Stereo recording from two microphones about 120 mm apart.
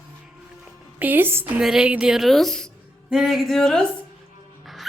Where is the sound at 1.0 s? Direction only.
15° right (ahead or behind).